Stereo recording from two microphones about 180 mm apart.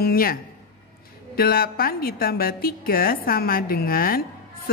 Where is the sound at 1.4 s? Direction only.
55° left (ahead or behind).